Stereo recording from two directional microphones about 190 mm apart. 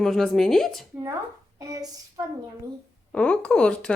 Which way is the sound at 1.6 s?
20° right (ahead or behind).